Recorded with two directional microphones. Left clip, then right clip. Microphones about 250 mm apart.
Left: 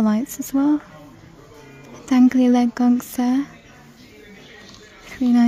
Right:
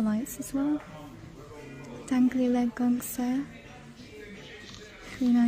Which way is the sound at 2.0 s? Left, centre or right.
Centre.